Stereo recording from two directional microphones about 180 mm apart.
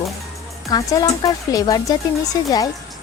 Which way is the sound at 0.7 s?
20° left (ahead or behind).